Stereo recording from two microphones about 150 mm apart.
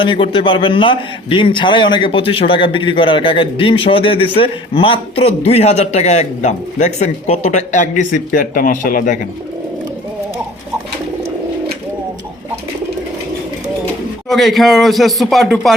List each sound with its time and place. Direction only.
0.0 s a man's voice: 35° left (ahead or behind); by 8.2 s 55° left (ahead or behind)
8.3 s speech: 70° left (ahead or behind)
14.3 s speech: centre (ahead or behind)